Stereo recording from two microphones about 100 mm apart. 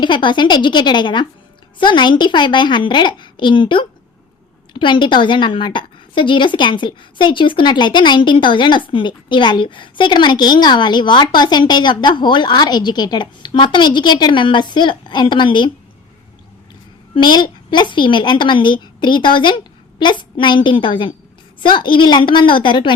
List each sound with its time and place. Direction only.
0.0 s a woman's voice: 50° left (ahead or behind)
17.2 s a woman's voice: 50° left (ahead or behind)